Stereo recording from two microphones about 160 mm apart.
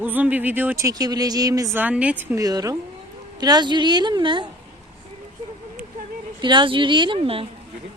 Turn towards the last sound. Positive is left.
turn(degrees=-35)  # may be behind; listen again after turning